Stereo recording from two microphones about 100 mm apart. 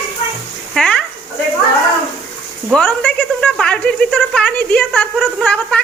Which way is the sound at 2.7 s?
10° left (ahead or behind).